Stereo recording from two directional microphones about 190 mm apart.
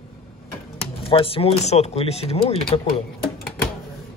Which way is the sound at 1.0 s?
30° left (ahead or behind).